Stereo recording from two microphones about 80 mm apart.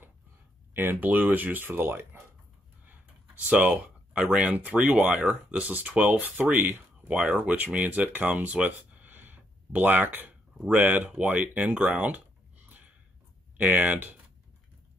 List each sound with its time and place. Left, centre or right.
0.7 s speech: right